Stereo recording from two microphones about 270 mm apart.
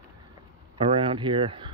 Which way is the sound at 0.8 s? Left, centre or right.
Centre.